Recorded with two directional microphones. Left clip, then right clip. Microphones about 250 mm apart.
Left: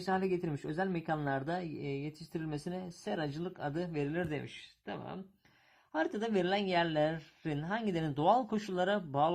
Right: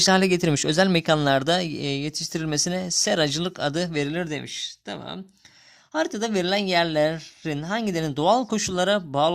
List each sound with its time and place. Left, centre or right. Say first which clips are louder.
0.0 s speech: right 14 dB; right